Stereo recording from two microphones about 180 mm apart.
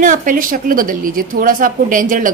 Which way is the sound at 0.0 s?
50° right (ahead or behind).